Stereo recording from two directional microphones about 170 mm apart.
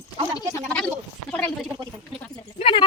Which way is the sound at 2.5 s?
35° left (ahead or behind).